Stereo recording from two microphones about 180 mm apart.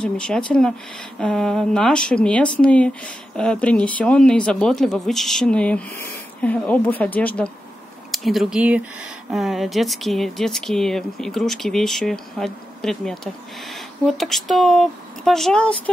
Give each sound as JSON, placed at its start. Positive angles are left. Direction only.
{"t": 0.0, "sound": "a woman's voice", "side_deg": 5}